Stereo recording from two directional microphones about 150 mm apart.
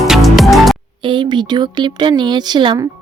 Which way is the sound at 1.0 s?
30° right (ahead or behind).